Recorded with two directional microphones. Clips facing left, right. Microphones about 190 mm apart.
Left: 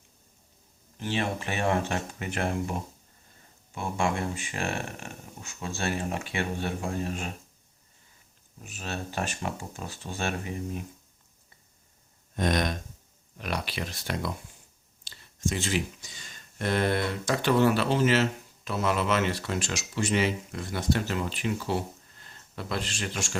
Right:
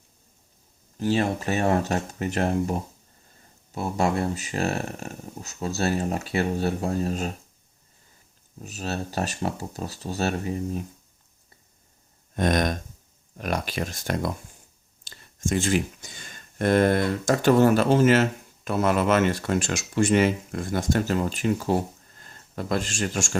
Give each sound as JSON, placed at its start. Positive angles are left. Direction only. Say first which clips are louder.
{"t": 0.9, "sound": "speech", "louder": "right 6 dB", "side_deg": -40}
{"t": 8.6, "sound": "speech", "louder": "right 5 dB", "side_deg": -40}
{"t": 12.4, "sound": "speech", "louder": "right 4 dB", "side_deg": -50}